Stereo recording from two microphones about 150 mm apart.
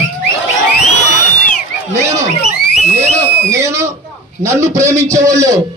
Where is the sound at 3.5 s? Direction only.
20° right (ahead or behind).